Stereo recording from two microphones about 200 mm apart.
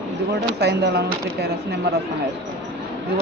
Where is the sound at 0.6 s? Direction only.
55° right (ahead or behind).